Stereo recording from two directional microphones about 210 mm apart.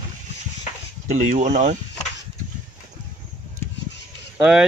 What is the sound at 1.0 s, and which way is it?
Speech, 35° right (ahead or behind).